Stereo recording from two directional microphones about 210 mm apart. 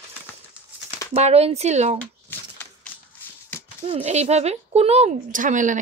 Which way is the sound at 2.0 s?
10° left (ahead or behind).